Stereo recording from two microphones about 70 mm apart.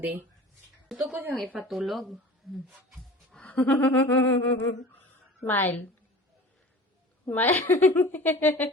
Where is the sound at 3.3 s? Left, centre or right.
Centre.